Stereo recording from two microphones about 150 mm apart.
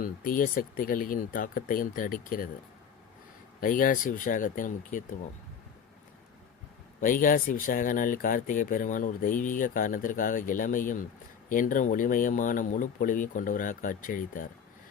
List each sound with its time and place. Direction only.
0.0 s speech: 65° left (ahead or behind)
3.6 s speech: 65° left (ahead or behind)
7.0 s speech: 65° left (ahead or behind)